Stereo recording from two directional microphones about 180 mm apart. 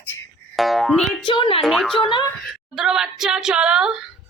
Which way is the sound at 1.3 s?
30° left (ahead or behind).